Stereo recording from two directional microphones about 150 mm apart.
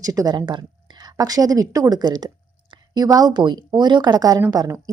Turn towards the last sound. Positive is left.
turn(degrees=-25)  # may be behind; listen again after turning